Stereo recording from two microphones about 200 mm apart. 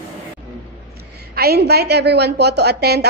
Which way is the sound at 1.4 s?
50° right (ahead or behind).